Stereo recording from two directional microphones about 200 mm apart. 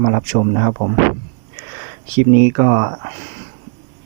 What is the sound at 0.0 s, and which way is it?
Speech, 40° right (ahead or behind).